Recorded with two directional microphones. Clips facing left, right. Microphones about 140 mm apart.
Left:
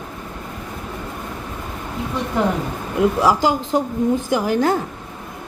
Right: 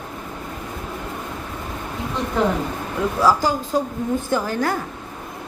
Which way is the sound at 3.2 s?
20° left (ahead or behind).